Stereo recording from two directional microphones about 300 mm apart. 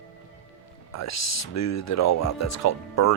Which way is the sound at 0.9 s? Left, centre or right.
Left.